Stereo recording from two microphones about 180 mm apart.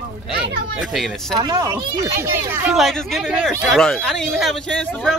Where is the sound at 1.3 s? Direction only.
20° right (ahead or behind).